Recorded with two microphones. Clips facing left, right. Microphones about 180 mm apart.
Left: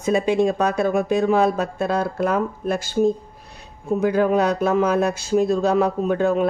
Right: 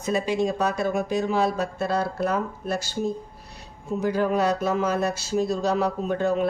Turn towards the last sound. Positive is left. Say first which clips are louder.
# left 4 dB
turn(degrees=55)  # may be behind; listen again after turning